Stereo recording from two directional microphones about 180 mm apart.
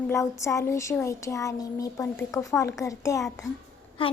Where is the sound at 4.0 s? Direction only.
30° left (ahead or behind).